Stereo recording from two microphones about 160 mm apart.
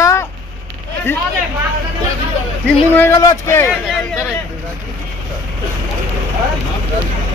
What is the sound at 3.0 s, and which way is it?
Speech, 20° left (ahead or behind).